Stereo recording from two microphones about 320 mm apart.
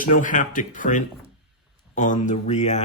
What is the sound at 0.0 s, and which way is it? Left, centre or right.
Speech, left.